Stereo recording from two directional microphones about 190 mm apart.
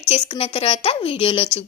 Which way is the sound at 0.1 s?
30° left (ahead or behind).